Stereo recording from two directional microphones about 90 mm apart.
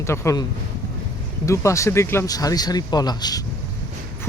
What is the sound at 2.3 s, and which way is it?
Speech, 45° left (ahead or behind).